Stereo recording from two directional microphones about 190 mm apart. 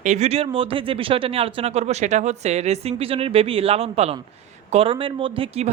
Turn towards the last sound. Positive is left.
turn(degrees=-30)  # may be behind; listen again after turning